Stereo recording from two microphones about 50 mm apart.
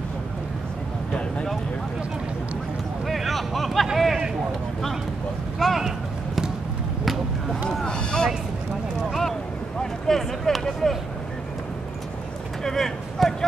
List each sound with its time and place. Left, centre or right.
3.1 s a sound: centre
5.6 s basketball bounce: centre
7.8 s speech: centre
9.8 s speech: centre
12.6 s speech: centre